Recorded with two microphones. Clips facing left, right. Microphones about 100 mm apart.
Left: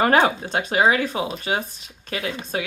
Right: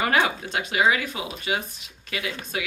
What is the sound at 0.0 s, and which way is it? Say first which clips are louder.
Speech: left 5 dB; 40° left (ahead or behind).